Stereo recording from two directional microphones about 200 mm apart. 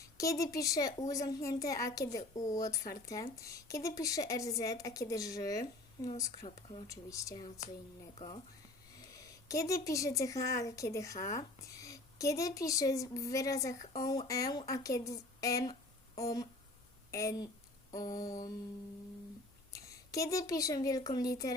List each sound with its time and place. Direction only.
0.0 s a woman's voice: 15° left (ahead or behind)
6.8 s a woman's voice: 15° left (ahead or behind)
9.0 s a woman's voice: 15° left (ahead or behind)
19.7 s speech: 15° left (ahead or behind)